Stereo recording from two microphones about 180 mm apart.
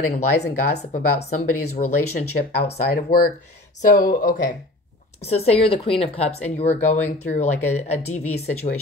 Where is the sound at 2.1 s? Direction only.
55° left (ahead or behind).